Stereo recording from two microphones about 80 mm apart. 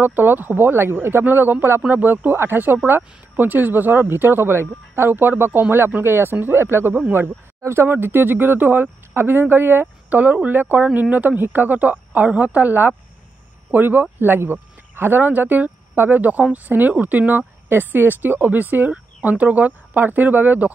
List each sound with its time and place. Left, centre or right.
0.0 s speech: right